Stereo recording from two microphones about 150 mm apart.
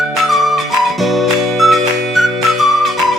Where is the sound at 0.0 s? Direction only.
Centre (ahead or behind).